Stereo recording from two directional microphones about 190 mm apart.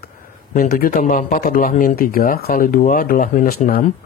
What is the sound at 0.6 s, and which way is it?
Speech, 50° left (ahead or behind).